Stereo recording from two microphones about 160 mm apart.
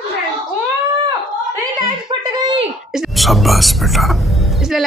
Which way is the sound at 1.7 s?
25° right (ahead or behind).